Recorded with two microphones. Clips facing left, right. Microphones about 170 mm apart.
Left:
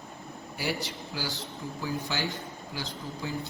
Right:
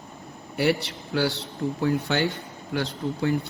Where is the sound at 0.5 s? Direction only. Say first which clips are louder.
Right 9 dB; 65° right (ahead or behind).